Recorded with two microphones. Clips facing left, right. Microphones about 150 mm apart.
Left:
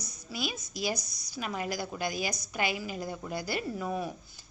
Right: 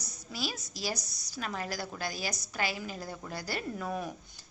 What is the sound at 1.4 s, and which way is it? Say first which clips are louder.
A woman's voice: left 2 dB; 10° left (ahead or behind).